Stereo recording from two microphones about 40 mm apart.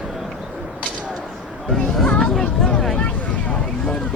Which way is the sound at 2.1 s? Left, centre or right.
Centre.